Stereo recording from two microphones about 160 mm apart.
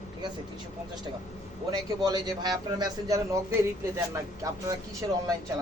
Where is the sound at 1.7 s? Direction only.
25° right (ahead or behind).